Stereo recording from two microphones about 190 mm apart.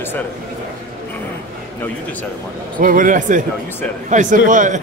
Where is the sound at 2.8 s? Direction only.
45° right (ahead or behind).